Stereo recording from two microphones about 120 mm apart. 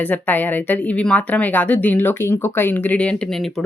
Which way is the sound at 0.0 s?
15° left (ahead or behind).